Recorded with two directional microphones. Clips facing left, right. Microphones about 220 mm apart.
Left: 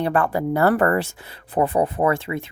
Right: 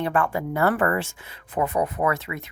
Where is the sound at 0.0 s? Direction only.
35° left (ahead or behind).